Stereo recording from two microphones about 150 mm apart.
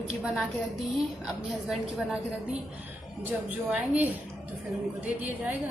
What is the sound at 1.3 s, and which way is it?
Speech, centre (ahead or behind).